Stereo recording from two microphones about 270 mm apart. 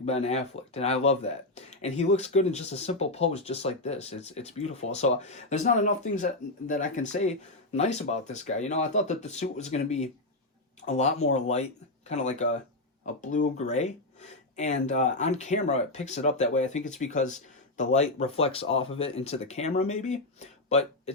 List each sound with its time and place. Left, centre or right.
0.0 s speech: left